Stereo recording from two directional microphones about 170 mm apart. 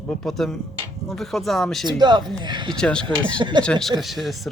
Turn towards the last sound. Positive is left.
turn(degrees=0)  # may be behind; listen again after turning